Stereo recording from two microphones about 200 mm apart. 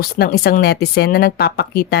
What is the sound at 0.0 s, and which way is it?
A woman's voice, 50° left (ahead or behind).